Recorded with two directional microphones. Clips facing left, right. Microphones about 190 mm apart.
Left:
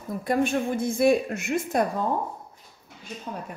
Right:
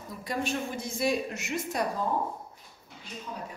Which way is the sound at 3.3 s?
50° left (ahead or behind).